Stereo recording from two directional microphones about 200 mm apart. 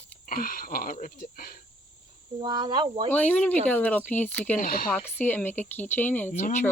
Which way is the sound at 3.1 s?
5° left (ahead or behind).